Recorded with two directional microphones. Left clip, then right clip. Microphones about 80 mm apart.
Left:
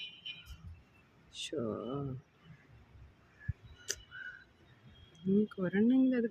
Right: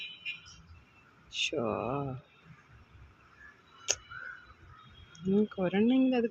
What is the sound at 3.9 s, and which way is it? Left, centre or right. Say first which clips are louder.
Tick-tock: right 8 dB; left.